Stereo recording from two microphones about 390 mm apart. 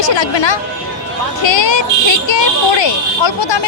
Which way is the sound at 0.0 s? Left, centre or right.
Left.